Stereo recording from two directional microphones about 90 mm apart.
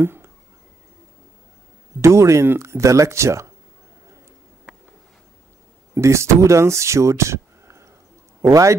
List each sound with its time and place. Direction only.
0.0 s a sound: 25° right (ahead or behind)
2.0 s speech: 35° right (ahead or behind)
5.9 s speech: 30° right (ahead or behind)